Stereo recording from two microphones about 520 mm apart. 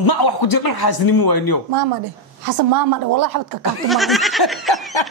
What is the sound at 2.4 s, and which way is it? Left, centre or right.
A woman's voice, right.